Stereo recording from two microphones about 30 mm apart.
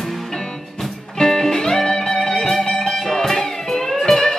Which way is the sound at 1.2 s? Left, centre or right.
Centre.